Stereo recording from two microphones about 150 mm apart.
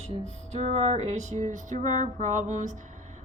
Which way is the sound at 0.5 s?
45° right (ahead or behind).